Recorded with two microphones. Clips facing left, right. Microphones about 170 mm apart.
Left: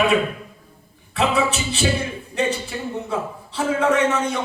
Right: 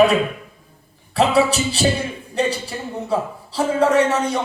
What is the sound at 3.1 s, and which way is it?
Speech, 35° right (ahead or behind).